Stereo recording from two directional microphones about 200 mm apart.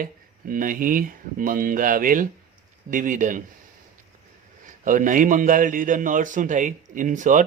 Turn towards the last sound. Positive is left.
turn(degrees=-40)  # may be behind; listen again after turning